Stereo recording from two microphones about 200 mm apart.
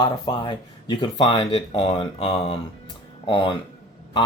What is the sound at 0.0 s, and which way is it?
Speech, 20° left (ahead or behind).